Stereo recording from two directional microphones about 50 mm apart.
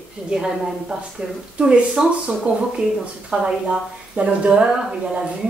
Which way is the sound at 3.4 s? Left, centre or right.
Right.